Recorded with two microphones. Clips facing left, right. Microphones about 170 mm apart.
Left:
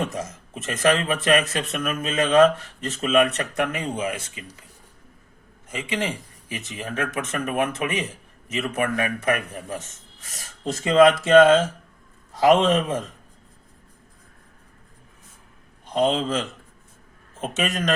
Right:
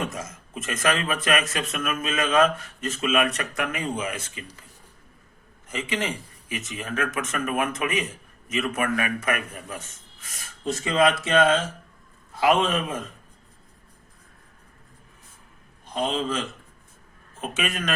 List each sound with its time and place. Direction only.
0.0 s speech: 35° left (ahead or behind)
5.6 s a man's voice: 25° left (ahead or behind)
17.4 s a man's voice: 35° left (ahead or behind)